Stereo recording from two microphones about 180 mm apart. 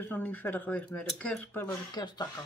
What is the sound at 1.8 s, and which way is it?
Speech, 25° left (ahead or behind).